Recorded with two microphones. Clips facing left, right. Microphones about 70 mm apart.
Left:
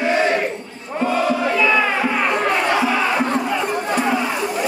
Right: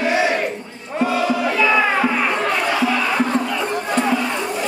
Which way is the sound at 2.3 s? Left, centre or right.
Centre.